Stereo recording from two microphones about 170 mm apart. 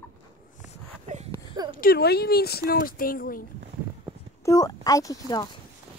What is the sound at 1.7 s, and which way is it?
Speech, 60° left (ahead or behind).